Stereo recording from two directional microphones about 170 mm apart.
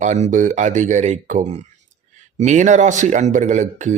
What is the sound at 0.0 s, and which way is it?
A man's voice, 45° right (ahead or behind).